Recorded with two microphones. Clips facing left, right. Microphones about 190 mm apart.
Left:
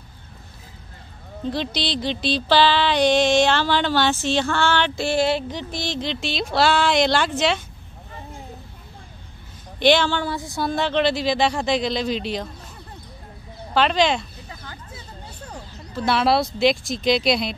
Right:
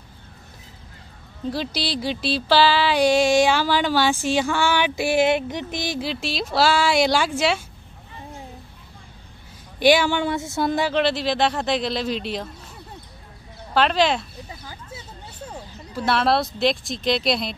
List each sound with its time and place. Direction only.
1.5 s music: 5° right (ahead or behind)
9.8 s music: 10° right (ahead or behind)
10.9 s speech: centre (ahead or behind)
13.7 s speech: centre (ahead or behind)
15.5 s a sound: 5° right (ahead or behind)
16.2 s speech: centre (ahead or behind)